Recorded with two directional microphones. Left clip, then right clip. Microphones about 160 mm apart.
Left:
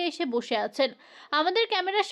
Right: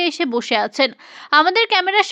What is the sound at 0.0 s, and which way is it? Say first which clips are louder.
Speech: right 9 dB; 15° right (ahead or behind).